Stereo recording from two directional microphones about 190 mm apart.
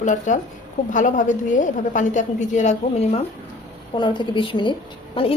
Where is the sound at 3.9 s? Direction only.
25° left (ahead or behind).